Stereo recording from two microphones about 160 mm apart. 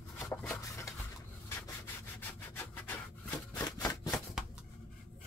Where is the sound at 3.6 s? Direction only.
25° left (ahead or behind).